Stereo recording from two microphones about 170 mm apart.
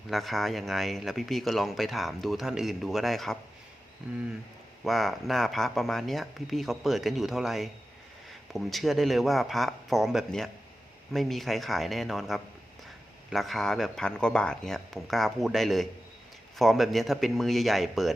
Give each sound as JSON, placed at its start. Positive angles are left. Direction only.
{"t": 0.1, "sound": "speech", "side_deg": 0}
{"t": 4.8, "sound": "speech", "side_deg": 0}